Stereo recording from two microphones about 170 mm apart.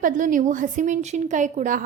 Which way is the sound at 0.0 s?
50° right (ahead or behind).